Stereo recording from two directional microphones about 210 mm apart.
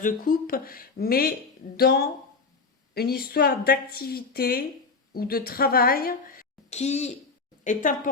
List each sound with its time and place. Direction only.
0.0 s a woman's voice: 45° left (ahead or behind)